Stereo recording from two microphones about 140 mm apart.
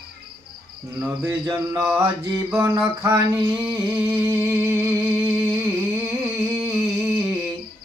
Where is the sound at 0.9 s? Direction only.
15° right (ahead or behind).